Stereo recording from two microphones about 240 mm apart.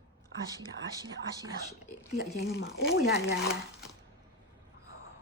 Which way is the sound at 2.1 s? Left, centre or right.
Left.